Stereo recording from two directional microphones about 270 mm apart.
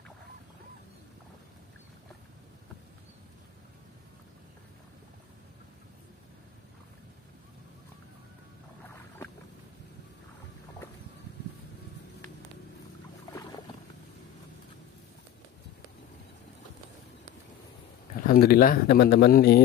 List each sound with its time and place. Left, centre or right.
18.2 s speech: left